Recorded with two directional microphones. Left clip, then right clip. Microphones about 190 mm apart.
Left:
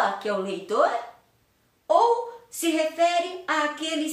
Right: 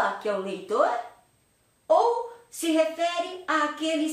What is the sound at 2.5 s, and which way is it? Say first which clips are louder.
A woman's voice: right 1 dB; 15° left (ahead or behind).